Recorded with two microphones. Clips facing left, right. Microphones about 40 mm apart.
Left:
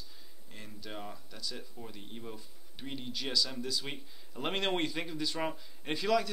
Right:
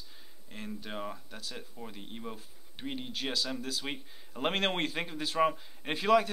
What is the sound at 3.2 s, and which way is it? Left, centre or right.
Speech, right.